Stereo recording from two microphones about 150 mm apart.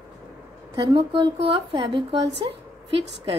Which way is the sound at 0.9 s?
35° right (ahead or behind).